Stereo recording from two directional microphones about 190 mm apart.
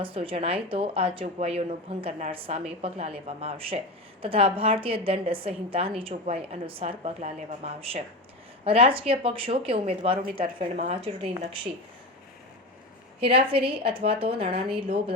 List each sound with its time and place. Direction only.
0.0 s a woman's voice: 30° right (ahead or behind)
13.1 s speech: 30° right (ahead or behind)